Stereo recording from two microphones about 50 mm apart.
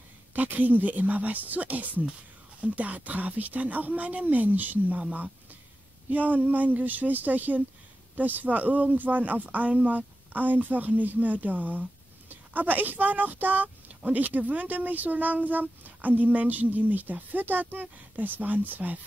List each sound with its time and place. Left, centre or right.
0.3 s speech: right
6.0 s speech: right